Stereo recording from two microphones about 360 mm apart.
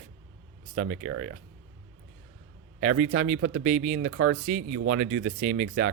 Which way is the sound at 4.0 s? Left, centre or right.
Right.